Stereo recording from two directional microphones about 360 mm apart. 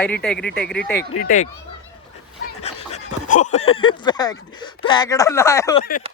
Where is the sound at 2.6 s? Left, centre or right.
Centre.